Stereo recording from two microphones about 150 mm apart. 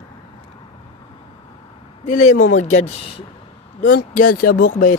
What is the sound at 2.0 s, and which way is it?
Speech, 55° left (ahead or behind).